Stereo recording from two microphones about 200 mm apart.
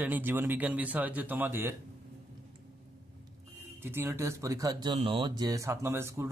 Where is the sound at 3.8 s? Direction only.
10° right (ahead or behind).